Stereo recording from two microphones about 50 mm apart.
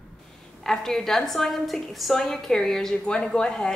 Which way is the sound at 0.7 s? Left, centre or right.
Centre.